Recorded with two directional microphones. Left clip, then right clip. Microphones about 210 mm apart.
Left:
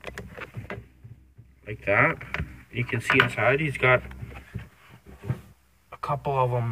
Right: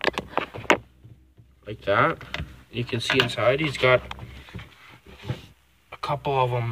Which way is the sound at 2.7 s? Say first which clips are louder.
Left 1 dB; 25° right (ahead or behind).